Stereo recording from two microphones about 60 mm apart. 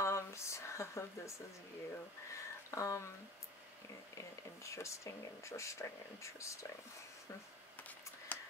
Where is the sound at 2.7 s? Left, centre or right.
Left.